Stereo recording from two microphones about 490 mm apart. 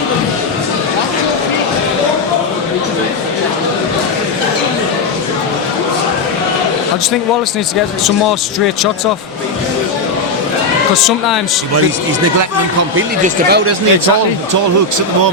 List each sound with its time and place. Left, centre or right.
13.0 s speech: centre